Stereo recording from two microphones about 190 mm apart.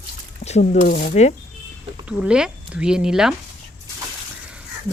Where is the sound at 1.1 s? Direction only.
35° left (ahead or behind).